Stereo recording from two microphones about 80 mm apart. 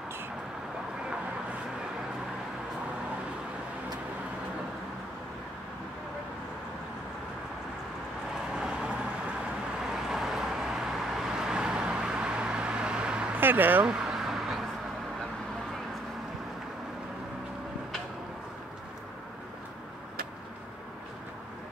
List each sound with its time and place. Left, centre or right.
8.5 s vehicle: centre
13.4 s speech: right
13.8 s a sound: centre